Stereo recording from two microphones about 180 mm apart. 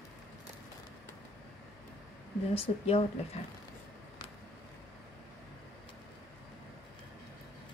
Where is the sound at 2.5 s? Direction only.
35° left (ahead or behind).